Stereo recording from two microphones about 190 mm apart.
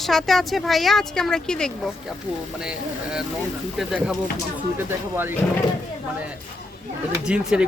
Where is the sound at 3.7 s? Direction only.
Centre (ahead or behind).